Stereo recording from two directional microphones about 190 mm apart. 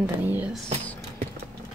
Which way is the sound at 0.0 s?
10° right (ahead or behind).